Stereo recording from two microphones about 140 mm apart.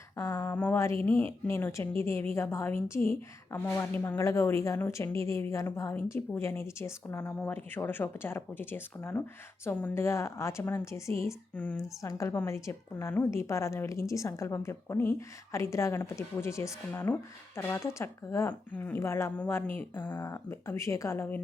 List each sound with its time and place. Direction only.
0.2 s a woman's voice: 15° left (ahead or behind)
11.5 s speech: 10° left (ahead or behind)
11.8 s a woman's voice: 20° left (ahead or behind)